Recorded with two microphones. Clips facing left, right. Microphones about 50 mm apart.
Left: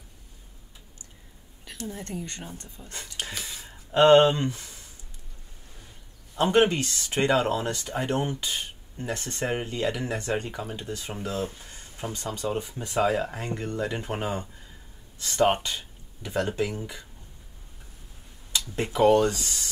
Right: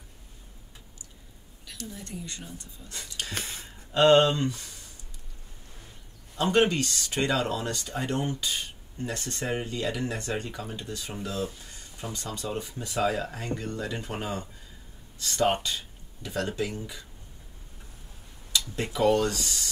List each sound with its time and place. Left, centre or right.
1.7 s speech: left
2.8 s speech: left
3.3 s speech: right
3.9 s speech: left
6.3 s speech: left
18.8 s speech: left